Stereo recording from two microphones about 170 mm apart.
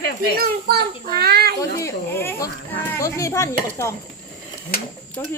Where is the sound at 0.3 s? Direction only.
60° right (ahead or behind).